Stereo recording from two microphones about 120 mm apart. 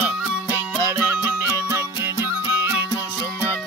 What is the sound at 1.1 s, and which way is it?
Music, 20° right (ahead or behind).